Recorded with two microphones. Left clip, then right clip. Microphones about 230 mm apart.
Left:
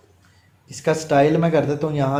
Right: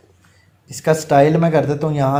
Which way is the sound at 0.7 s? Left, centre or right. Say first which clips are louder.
Right 4 dB; right.